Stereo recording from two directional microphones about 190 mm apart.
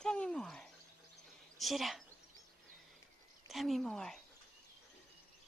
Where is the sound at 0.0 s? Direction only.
5° left (ahead or behind).